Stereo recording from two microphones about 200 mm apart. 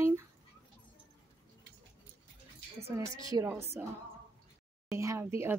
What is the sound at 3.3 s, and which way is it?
Speech, 15° right (ahead or behind).